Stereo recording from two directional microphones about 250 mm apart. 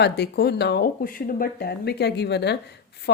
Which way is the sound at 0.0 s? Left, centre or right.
Left.